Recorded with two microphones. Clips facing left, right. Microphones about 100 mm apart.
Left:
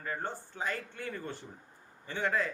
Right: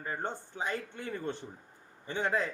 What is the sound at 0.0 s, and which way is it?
A man's voice, 20° right (ahead or behind).